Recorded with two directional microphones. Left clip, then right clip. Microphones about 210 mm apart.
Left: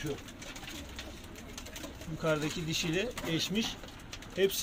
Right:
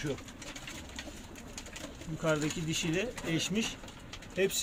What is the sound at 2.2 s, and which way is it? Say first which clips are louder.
Speech: even; 5° right (ahead or behind).